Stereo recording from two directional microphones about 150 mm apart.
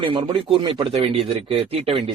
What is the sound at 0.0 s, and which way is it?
A man's voice, 35° right (ahead or behind).